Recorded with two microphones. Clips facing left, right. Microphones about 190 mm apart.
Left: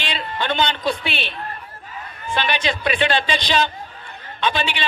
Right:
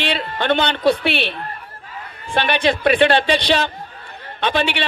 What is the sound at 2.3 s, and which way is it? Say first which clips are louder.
Speech: right 5 dB; 60° right (ahead or behind).